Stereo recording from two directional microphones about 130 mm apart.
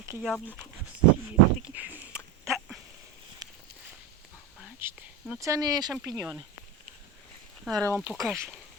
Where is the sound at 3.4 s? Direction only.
30° right (ahead or behind).